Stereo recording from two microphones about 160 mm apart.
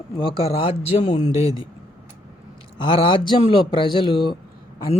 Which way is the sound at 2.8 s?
30° left (ahead or behind).